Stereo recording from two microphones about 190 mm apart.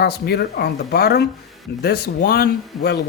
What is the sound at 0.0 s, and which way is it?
Speech, 55° left (ahead or behind).